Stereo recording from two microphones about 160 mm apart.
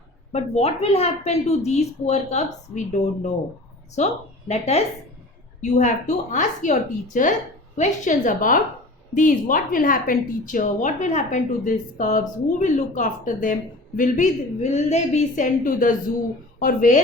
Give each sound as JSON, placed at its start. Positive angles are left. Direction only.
{"t": 0.3, "sound": "a woman's voice", "side_deg": 40}